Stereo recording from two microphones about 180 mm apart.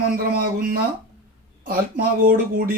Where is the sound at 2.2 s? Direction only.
55° right (ahead or behind).